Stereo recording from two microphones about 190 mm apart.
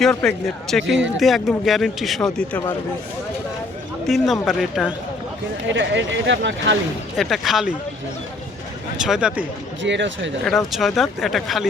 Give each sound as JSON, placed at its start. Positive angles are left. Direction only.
{"t": 0.0, "sound": "speech", "side_deg": 5}
{"t": 4.0, "sound": "speech", "side_deg": 0}
{"t": 5.6, "sound": "speech", "side_deg": -70}
{"t": 7.2, "sound": "speech", "side_deg": 0}
{"t": 9.0, "sound": "speech", "side_deg": -5}
{"t": 9.8, "sound": "speech", "side_deg": -70}
{"t": 10.7, "sound": "speech", "side_deg": 0}